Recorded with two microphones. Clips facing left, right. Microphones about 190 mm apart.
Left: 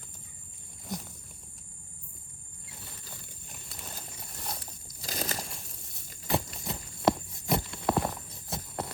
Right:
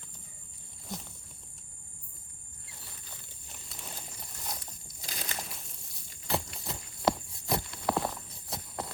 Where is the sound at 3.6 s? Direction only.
Centre (ahead or behind).